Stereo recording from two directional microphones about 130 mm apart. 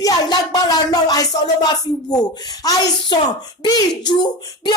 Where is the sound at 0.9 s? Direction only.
30° left (ahead or behind).